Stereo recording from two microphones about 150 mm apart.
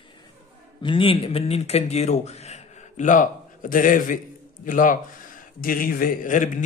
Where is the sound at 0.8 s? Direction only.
35° left (ahead or behind).